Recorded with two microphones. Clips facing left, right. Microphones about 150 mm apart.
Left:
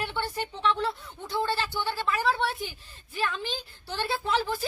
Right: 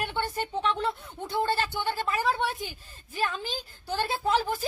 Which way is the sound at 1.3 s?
50° right (ahead or behind).